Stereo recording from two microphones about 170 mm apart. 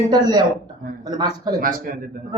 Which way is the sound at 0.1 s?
25° right (ahead or behind).